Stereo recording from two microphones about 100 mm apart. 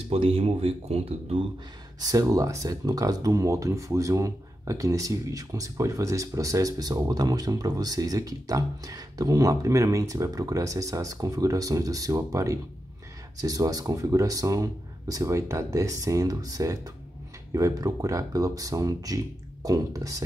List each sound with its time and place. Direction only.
0.1 s speech: 70° right (ahead or behind); by 1.4 s 90° right
2.0 s speech: 35° right (ahead or behind)